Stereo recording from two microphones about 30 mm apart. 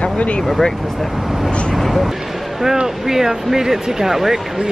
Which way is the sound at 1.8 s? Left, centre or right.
Centre.